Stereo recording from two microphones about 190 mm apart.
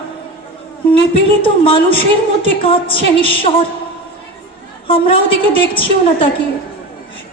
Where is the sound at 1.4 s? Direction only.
30° left (ahead or behind).